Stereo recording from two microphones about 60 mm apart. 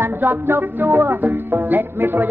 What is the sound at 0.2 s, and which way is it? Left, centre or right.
Music, right.